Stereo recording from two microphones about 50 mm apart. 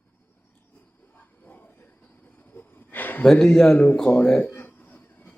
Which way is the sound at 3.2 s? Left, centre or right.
Centre.